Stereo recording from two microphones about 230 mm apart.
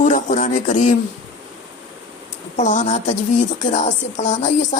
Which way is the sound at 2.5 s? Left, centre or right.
Left.